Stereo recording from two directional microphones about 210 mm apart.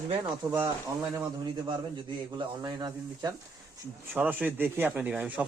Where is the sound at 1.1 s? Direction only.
20° right (ahead or behind).